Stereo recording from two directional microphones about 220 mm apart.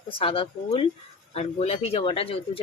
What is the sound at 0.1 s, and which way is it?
Speech, 25° left (ahead or behind).